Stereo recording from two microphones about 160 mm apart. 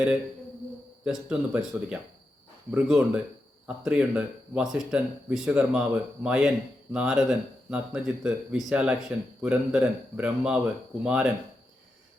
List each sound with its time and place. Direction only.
1.0 s speech: 5° right (ahead or behind)